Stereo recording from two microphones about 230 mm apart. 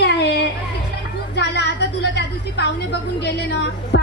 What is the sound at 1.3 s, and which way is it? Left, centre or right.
A woman's voice, left.